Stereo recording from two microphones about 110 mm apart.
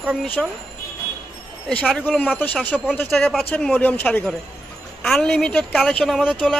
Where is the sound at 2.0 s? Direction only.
15° left (ahead or behind).